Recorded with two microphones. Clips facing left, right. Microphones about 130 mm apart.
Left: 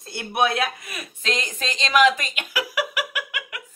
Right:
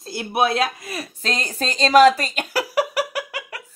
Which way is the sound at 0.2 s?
25° right (ahead or behind).